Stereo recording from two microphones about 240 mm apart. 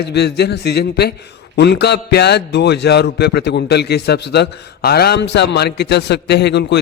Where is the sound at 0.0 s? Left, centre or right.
Left.